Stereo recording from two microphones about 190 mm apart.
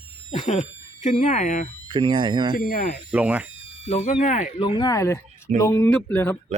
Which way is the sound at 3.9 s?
40° left (ahead or behind).